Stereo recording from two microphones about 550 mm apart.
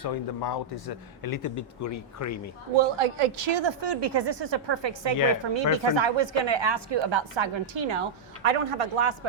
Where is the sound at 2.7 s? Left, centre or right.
Right.